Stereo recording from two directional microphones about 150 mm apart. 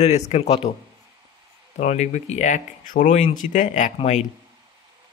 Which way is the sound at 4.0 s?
45° left (ahead or behind).